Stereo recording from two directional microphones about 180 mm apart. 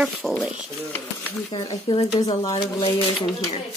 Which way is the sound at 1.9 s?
35° left (ahead or behind).